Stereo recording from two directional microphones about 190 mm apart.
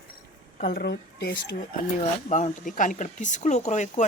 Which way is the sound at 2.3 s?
40° left (ahead or behind).